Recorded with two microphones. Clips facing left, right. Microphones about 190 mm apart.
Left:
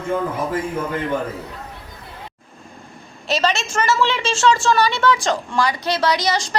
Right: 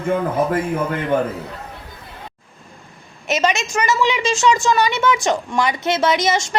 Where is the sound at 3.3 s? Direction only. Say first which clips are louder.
Right 1 dB; 20° right (ahead or behind).